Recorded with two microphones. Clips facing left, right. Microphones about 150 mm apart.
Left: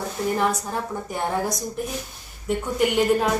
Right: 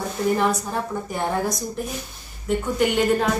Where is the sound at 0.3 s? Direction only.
5° left (ahead or behind).